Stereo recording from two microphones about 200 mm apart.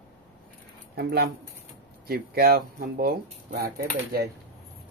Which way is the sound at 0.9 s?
50° right (ahead or behind).